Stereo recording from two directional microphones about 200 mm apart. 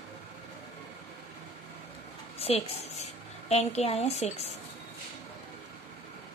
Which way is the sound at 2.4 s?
30° left (ahead or behind).